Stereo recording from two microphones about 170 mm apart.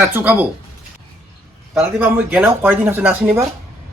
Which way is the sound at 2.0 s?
10° right (ahead or behind).